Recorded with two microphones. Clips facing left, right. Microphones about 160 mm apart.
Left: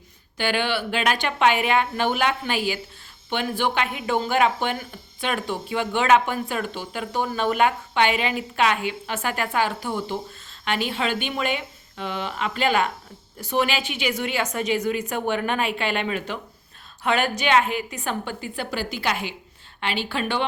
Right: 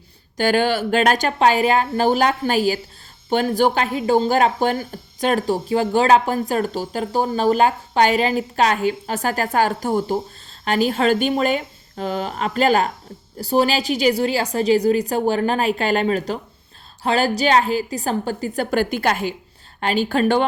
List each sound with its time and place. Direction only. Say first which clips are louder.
0.3 s a woman's voice: right 6 dB; 40° right (ahead or behind)